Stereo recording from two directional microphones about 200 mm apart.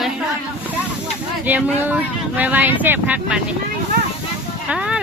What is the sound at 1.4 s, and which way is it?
Speech, 5° right (ahead or behind).